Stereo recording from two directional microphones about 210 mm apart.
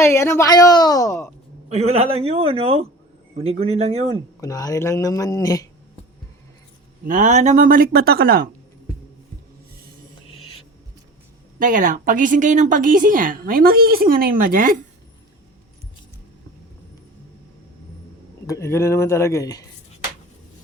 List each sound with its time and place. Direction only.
0.0 s speech: 10° left (ahead or behind)
1.7 s a man's voice: 30° right (ahead or behind)
4.4 s speech: 15° left (ahead or behind)
7.1 s a woman's voice: 35° right (ahead or behind)
11.6 s a woman's voice: 40° right (ahead or behind)
18.4 s speech: 15° left (ahead or behind)